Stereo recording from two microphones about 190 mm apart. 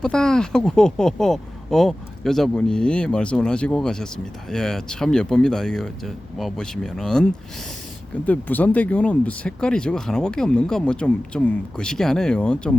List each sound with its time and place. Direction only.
0.0 s speech: 5° left (ahead or behind)
8.3 s speech: 10° left (ahead or behind)